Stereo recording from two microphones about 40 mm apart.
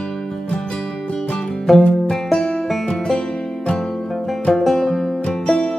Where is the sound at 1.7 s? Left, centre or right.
Centre.